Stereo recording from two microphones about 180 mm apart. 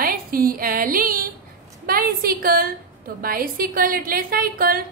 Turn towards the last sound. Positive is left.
turn(degrees=-55)  # may be behind; listen again after turning